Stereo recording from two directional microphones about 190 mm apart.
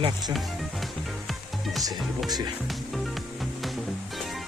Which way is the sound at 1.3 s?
Centre (ahead or behind).